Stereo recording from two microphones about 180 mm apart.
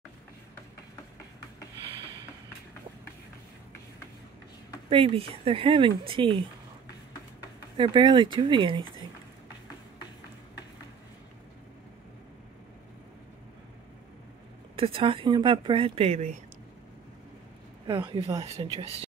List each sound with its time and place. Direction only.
4.8 s speech: 30° right (ahead or behind)
7.7 s speech: 25° right (ahead or behind)
14.8 s speech: 30° right (ahead or behind)
17.8 s speech: 25° right (ahead or behind)